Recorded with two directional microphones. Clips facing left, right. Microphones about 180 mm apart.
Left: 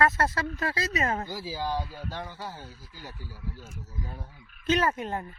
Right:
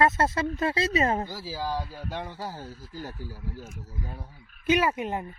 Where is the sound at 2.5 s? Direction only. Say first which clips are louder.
Right 6 dB; 45° right (ahead or behind).